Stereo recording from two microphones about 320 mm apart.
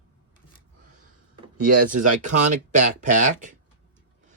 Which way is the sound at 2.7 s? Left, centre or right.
Right.